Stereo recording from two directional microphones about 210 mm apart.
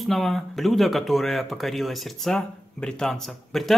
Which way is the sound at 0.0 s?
Centre (ahead or behind).